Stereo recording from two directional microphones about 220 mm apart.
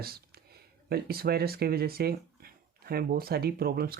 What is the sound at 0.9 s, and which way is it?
Speech, 45° right (ahead or behind).